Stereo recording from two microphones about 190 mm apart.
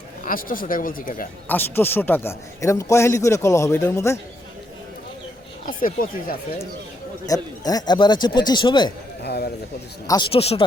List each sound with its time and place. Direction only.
0.3 s speech: 45° left (ahead or behind)
1.5 s a man's voice: 10° left (ahead or behind)
5.6 s speech: 45° left (ahead or behind)
7.3 s speech: 20° left (ahead or behind)
9.2 s speech: 60° left (ahead or behind)
10.1 s speech: 25° left (ahead or behind)